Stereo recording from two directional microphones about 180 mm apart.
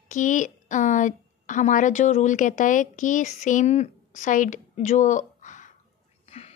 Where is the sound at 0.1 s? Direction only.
45° left (ahead or behind).